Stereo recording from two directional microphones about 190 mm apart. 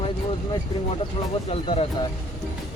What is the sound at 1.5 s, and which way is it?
Speech, 30° left (ahead or behind).